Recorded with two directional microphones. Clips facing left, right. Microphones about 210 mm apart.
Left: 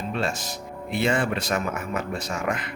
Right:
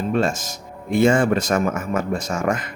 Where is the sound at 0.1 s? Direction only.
45° right (ahead or behind).